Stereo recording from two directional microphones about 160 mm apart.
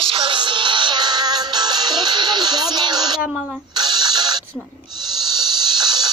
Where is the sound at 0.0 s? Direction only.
35° right (ahead or behind).